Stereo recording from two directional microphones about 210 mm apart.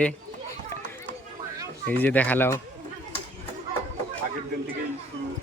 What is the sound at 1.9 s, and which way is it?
Speech, 10° left (ahead or behind).